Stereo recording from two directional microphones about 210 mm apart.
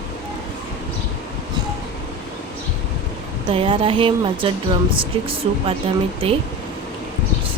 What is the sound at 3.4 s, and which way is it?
Speech, 25° right (ahead or behind).